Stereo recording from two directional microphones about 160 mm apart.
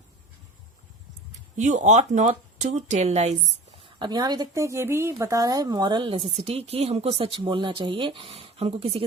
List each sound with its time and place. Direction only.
1.5 s speech: 45° right (ahead or behind)
3.9 s a woman's voice: 25° right (ahead or behind)